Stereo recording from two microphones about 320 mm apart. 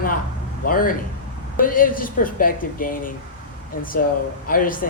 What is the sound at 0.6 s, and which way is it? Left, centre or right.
A man's voice, left.